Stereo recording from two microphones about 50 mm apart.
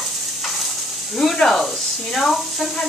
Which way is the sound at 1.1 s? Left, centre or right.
Centre.